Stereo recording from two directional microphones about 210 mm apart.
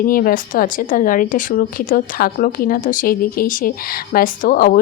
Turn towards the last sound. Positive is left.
turn(degrees=40)  # may be behind; listen again after turning